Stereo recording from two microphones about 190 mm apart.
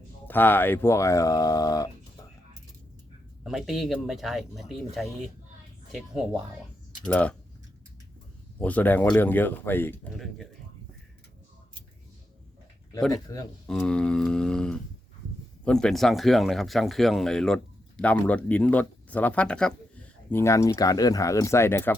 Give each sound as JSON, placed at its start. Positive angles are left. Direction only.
{"t": 0.3, "sound": "speech", "side_deg": 10}
{"t": 3.4, "sound": "speech", "side_deg": 0}
{"t": 7.0, "sound": "speech", "side_deg": 5}
{"t": 8.5, "sound": "speech", "side_deg": 10}
{"t": 13.1, "sound": "a man's voice", "side_deg": 20}
{"t": 13.7, "sound": "speech", "side_deg": 5}